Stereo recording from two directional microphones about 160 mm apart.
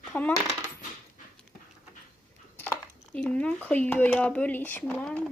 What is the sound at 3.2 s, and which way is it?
Speech, 5° left (ahead or behind).